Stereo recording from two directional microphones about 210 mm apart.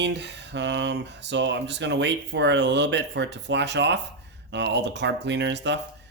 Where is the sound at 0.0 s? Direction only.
55° right (ahead or behind).